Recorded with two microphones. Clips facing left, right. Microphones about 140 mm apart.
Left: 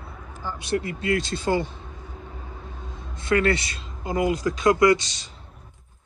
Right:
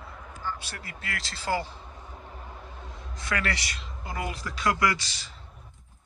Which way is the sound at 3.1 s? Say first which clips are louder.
Left 10 dB; 25° left (ahead or behind).